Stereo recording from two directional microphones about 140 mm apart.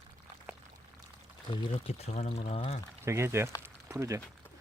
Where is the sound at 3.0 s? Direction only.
20° right (ahead or behind).